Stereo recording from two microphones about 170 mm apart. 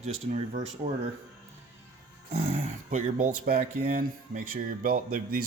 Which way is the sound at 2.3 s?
40° right (ahead or behind).